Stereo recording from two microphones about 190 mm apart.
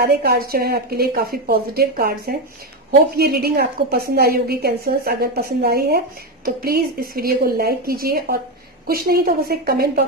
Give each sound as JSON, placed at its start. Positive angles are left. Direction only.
{"t": 0.0, "sound": "a woman's voice", "side_deg": -55}